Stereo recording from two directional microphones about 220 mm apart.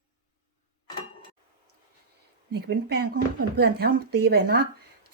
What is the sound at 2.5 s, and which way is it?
Speech, 45° right (ahead or behind).